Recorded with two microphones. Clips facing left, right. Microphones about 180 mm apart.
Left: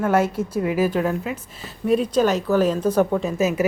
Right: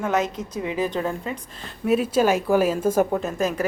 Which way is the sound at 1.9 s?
5° right (ahead or behind).